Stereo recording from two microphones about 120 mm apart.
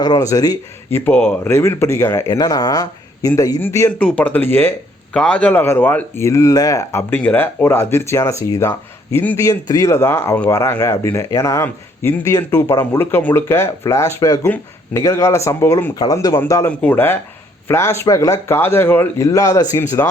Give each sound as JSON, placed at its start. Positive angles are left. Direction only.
{"t": 0.0, "sound": "speech", "side_deg": 30}
{"t": 1.5, "sound": "speech", "side_deg": 20}
{"t": 7.1, "sound": "speech", "side_deg": 15}
{"t": 9.5, "sound": "speech", "side_deg": 30}
{"t": 16.6, "sound": "speech", "side_deg": 15}